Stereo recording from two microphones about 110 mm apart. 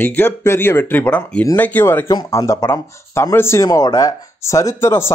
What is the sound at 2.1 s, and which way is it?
Speech, 35° left (ahead or behind).